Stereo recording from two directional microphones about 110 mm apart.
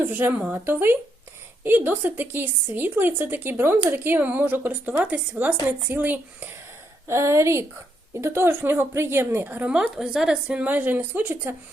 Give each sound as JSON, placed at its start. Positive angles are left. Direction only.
{"t": 0.0, "sound": "a woman's voice", "side_deg": -20}